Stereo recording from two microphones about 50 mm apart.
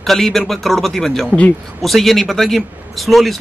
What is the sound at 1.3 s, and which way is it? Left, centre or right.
Speech, left.